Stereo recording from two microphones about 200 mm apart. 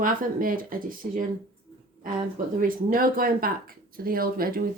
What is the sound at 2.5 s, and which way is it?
Speech, 45° right (ahead or behind).